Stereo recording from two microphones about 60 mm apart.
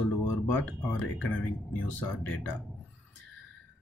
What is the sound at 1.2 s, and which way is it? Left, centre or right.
Speech, left.